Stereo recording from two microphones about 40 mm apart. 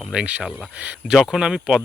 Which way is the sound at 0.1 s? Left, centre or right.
Right.